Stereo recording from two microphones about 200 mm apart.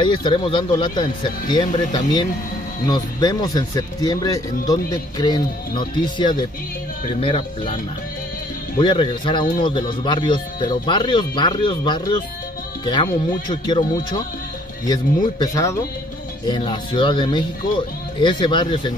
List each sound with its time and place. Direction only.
0.0 s speech: 25° left (ahead or behind)